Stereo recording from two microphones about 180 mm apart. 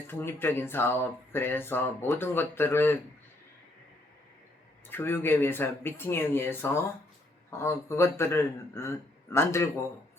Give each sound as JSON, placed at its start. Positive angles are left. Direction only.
{"t": 0.1, "sound": "speech", "side_deg": 10}
{"t": 4.9, "sound": "speech", "side_deg": 10}